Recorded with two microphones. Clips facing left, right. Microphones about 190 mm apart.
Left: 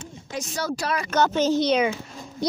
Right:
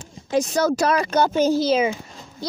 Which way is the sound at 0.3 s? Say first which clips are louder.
Right 9 dB; 35° right (ahead or behind).